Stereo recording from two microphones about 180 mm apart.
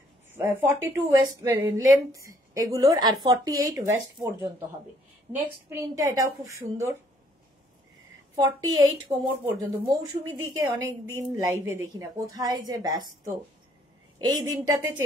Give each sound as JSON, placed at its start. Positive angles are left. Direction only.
{"t": 0.3, "sound": "a woman's voice", "side_deg": -15}
{"t": 5.7, "sound": "a woman's voice", "side_deg": -15}
{"t": 8.4, "sound": "a woman's voice", "side_deg": -20}
{"t": 10.8, "sound": "a woman's voice", "side_deg": -90}
{"t": 11.3, "sound": "a woman's voice", "side_deg": -15}